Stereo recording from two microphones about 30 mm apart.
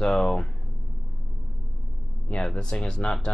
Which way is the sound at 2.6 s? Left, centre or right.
Left.